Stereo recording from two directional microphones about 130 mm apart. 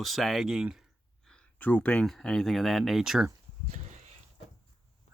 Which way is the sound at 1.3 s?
10° left (ahead or behind).